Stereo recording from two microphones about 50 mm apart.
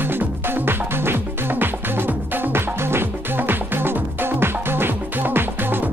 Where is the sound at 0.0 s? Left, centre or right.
Right.